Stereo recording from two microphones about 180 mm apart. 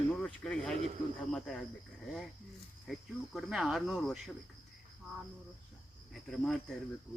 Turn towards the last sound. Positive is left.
turn(degrees=0)  # may be behind; listen again after turning